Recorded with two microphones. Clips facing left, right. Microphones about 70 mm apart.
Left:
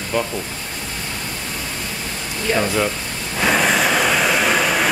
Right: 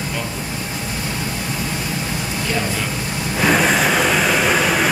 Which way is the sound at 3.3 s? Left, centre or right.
Centre.